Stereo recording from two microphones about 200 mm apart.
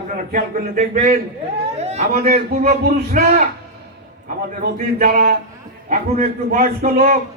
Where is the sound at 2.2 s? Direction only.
40° right (ahead or behind).